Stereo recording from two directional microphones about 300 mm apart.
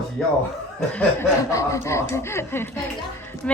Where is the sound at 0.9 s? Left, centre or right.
Centre.